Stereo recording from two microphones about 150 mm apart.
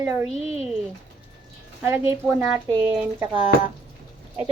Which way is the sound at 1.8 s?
15° right (ahead or behind).